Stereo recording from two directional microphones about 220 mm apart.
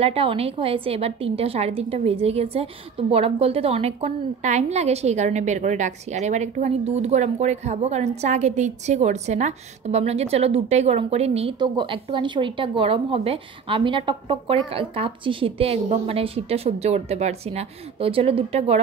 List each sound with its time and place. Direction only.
0.0 s a woman's voice: 25° right (ahead or behind)